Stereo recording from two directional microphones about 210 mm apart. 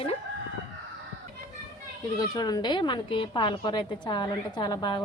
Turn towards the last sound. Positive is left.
turn(degrees=20)  # may be behind; listen again after turning